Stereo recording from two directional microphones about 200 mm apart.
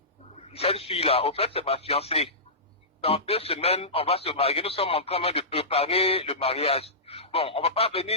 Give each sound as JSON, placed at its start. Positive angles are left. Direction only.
{"t": 0.5, "sound": "speech", "side_deg": 30}